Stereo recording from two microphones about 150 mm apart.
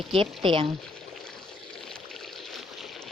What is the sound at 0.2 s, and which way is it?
Speech, 35° right (ahead or behind).